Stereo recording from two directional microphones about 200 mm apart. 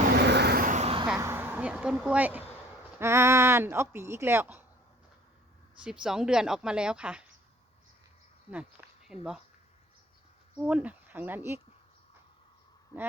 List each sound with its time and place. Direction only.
0.2 s vehicle: 55° right (ahead or behind); by 1.1 s 30° right (ahead or behind)
1.2 s a sound: 10° right (ahead or behind)
3.0 s speech: 15° right (ahead or behind)
5.7 s speech: 5° right (ahead or behind)
8.4 s insect: 5° right (ahead or behind)
10.6 s speech: 5° right (ahead or behind)